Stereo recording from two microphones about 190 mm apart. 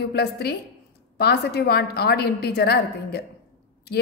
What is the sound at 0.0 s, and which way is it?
A woman's voice, 55° left (ahead or behind).